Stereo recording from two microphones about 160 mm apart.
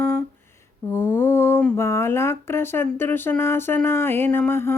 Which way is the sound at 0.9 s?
20° left (ahead or behind).